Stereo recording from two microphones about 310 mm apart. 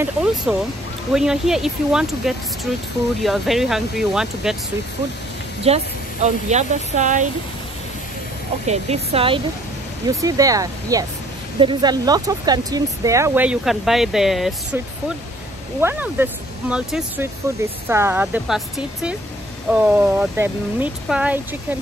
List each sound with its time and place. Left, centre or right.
0.0 s speech: centre
5.7 s speech: centre
8.6 s speech: centre
15.8 s speech: centre